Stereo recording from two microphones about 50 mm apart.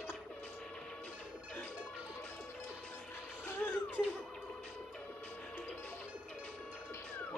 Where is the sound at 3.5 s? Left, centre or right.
Left.